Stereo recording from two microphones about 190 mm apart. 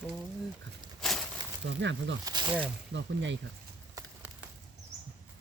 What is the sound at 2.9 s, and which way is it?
Speech, 70° right (ahead or behind).